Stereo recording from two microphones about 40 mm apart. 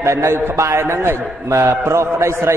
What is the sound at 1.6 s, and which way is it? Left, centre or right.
Speech, right.